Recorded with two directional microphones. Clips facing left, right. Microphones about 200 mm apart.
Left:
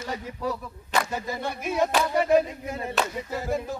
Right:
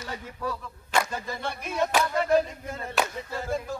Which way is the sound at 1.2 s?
15° left (ahead or behind).